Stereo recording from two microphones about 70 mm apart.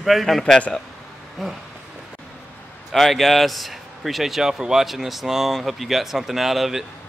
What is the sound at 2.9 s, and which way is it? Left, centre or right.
Speech, centre.